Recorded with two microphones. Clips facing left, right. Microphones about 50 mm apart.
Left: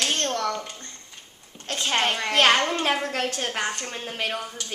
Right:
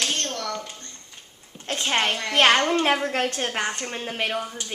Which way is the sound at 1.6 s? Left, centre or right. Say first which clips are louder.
Right 1 dB; centre.